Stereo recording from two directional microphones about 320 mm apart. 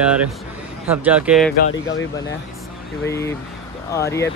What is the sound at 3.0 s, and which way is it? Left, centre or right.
Speech, centre.